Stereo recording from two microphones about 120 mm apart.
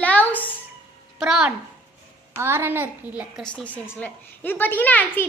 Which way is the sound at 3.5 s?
15° left (ahead or behind).